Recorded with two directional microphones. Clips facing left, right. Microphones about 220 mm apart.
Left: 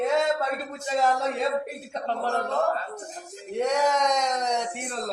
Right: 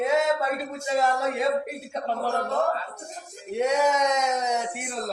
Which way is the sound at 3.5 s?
10° right (ahead or behind).